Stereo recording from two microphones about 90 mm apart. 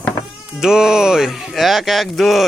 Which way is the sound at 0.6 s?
5° right (ahead or behind).